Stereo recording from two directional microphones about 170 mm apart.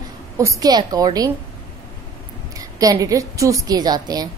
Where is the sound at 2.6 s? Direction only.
20° right (ahead or behind).